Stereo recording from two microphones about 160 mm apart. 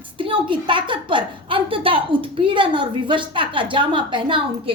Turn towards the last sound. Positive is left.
turn(degrees=-30)  # may be behind; listen again after turning